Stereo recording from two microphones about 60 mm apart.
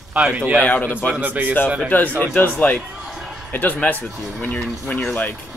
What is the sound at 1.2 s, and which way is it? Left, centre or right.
Speech, right.